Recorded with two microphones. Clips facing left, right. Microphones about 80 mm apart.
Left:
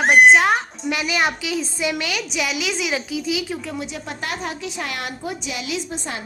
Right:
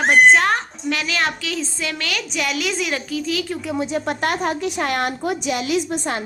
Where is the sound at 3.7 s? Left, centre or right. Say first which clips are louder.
Right 7 dB; right.